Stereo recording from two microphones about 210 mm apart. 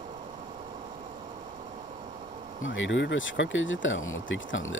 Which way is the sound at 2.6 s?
65° left (ahead or behind).